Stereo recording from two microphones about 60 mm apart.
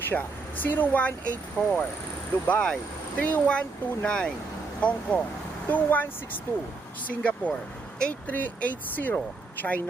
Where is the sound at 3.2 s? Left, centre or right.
Left.